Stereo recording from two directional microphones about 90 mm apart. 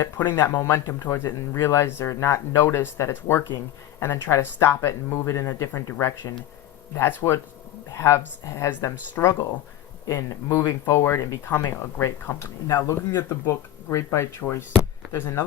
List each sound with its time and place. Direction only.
0.0 s speech: 25° left (ahead or behind)
9.2 s speech: 25° left (ahead or behind)
10.1 s speech: 35° left (ahead or behind)